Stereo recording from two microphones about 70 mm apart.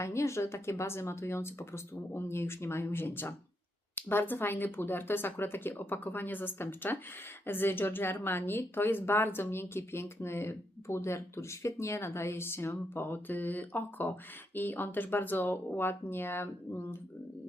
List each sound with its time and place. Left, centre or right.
0.0 s speech: left